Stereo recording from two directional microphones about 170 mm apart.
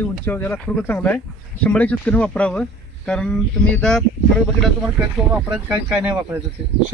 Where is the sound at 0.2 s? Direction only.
10° left (ahead or behind); by 5.8 s 10° right (ahead or behind).